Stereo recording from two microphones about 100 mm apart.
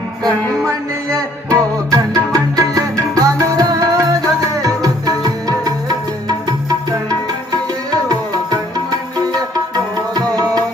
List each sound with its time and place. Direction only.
0.6 s music: 35° right (ahead or behind)
9.3 s music: 40° right (ahead or behind)